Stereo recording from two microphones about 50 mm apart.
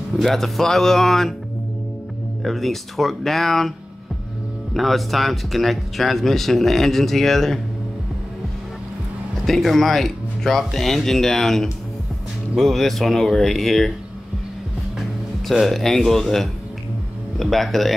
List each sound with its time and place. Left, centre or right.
0.2 s speech: centre
2.4 s speech: centre
4.7 s speech: centre
9.5 s speech: centre
15.6 s speech: centre